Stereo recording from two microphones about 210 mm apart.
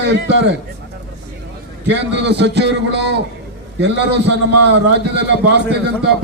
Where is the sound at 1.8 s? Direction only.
55° right (ahead or behind).